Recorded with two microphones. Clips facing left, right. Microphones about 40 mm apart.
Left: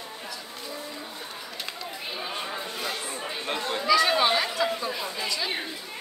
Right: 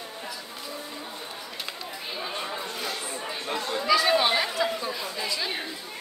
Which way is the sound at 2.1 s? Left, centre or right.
Centre.